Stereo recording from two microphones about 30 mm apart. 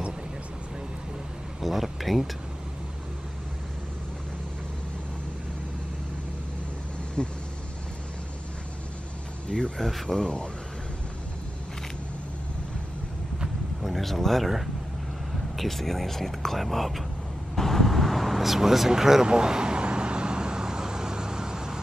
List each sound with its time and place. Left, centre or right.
1.6 s speech: centre
7.2 s speech: left
9.8 s speech: centre
10.0 s speech: left
13.8 s speech: centre
15.5 s speech: centre
17.6 s vehicle: centre
18.9 s speech: centre
19.2 s vehicle: right